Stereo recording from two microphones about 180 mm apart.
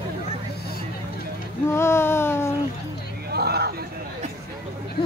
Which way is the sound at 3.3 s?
60° right (ahead or behind).